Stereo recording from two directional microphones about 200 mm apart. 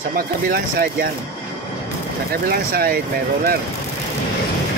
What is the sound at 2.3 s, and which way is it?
Speech, 50° right (ahead or behind).